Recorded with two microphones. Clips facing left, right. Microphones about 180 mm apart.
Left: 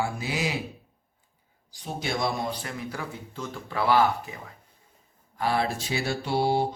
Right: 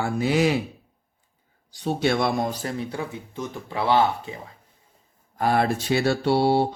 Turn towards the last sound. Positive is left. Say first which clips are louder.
# right 5 dB
turn(degrees=-65)  # may be behind; listen again after turning